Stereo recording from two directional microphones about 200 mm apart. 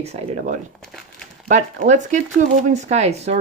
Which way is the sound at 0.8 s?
5° left (ahead or behind).